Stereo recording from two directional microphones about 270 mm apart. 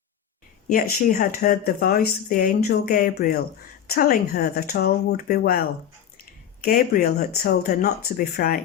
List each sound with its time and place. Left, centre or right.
0.7 s speech: left